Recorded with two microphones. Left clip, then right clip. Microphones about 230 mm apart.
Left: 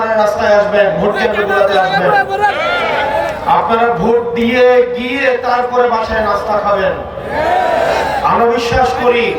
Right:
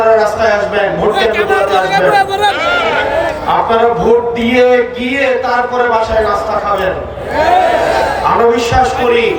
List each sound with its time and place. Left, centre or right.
4.5 s a man's voice: left